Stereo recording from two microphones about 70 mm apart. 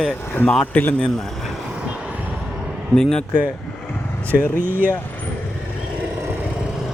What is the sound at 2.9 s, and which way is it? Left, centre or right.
Speech, centre.